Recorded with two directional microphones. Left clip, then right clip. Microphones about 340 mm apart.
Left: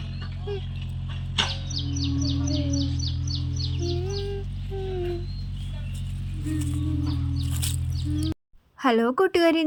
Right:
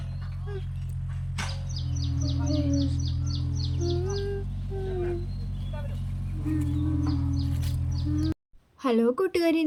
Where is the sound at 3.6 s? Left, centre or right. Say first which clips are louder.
Right 1 dB; centre.